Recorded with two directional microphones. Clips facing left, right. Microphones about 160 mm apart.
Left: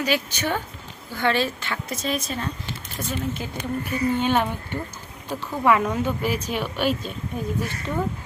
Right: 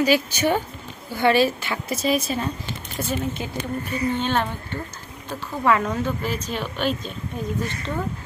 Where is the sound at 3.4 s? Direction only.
20° right (ahead or behind).